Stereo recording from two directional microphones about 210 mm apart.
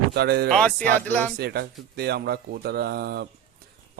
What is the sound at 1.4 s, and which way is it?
Speech, 50° right (ahead or behind).